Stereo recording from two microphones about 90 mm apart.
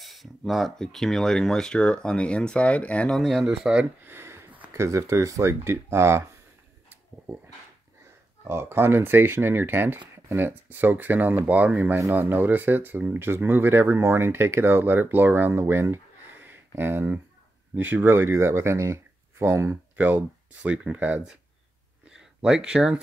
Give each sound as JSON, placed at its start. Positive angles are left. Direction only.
{"t": 0.0, "sound": "speech", "side_deg": 0}
{"t": 3.1, "sound": "speech", "side_deg": 0}
{"t": 4.0, "sound": "a sound", "side_deg": -25}
{"t": 4.7, "sound": "speech", "side_deg": -35}
{"t": 8.5, "sound": "speech", "side_deg": -25}
{"t": 22.0, "sound": "a sound", "side_deg": -10}